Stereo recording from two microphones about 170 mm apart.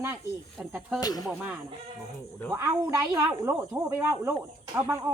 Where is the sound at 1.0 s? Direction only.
20° left (ahead or behind).